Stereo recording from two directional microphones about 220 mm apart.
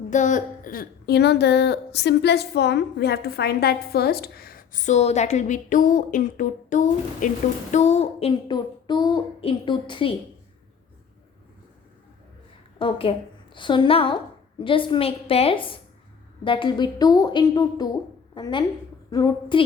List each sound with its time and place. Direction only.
0.1 s a woman's voice: 35° left (ahead or behind)
12.8 s a woman's voice: 25° left (ahead or behind)